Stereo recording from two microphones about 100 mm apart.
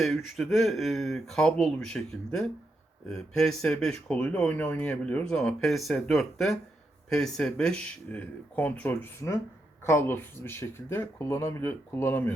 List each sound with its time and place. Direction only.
0.0 s speech: centre (ahead or behind); by 12.3 s 20° left (ahead or behind)